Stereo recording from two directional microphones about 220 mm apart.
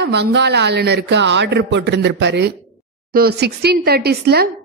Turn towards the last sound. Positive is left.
turn(degrees=-45)  # may be behind; listen again after turning